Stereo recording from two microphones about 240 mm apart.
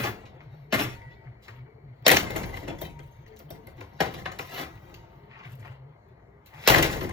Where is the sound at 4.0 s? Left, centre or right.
Centre.